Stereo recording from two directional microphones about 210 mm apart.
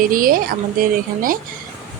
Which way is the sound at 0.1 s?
40° right (ahead or behind).